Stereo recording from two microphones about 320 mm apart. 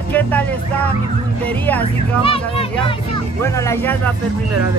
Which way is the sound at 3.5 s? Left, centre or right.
Centre.